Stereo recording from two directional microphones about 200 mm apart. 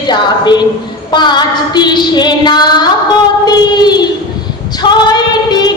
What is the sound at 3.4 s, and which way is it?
Child singing, 20° left (ahead or behind).